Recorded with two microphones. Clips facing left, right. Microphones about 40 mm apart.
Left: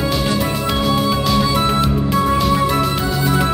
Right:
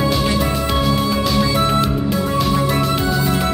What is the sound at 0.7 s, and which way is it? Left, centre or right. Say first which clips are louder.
Music: left 1 dB; centre.